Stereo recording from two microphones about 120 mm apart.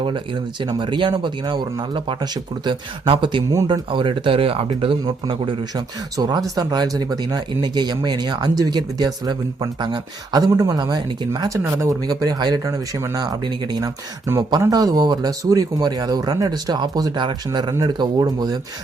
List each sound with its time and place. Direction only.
0.6 s speech: 40° right (ahead or behind)
5.7 s speech: 30° right (ahead or behind)
14.3 s speech: 20° right (ahead or behind)